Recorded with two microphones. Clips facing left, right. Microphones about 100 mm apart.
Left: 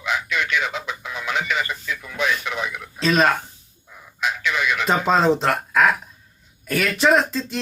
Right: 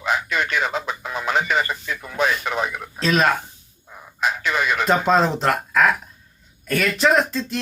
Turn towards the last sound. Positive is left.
turn(degrees=0)  # may be behind; listen again after turning